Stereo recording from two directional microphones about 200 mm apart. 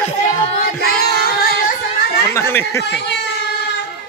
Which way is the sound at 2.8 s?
60° left (ahead or behind).